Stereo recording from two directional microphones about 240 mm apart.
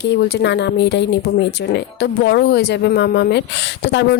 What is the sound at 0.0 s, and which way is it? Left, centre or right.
A woman's voice, left.